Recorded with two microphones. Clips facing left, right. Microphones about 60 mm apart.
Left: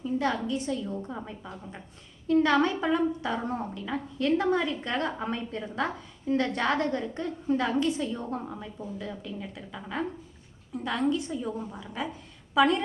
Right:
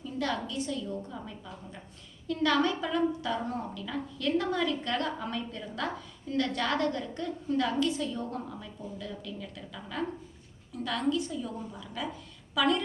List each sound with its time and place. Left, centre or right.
0.0 s a woman's voice: left